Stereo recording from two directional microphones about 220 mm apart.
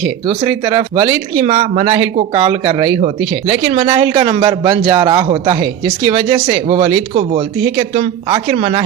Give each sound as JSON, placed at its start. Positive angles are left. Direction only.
{"t": 0.3, "sound": "speech", "side_deg": -20}